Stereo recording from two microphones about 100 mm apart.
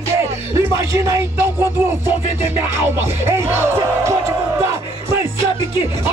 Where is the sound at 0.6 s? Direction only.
30° right (ahead or behind).